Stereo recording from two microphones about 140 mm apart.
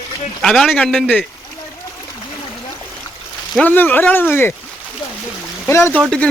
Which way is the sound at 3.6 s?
15° left (ahead or behind).